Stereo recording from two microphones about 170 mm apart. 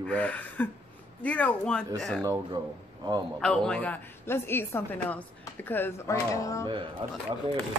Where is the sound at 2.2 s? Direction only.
25° right (ahead or behind).